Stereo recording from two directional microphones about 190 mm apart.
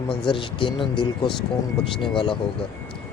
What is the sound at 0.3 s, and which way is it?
Speech, 25° left (ahead or behind).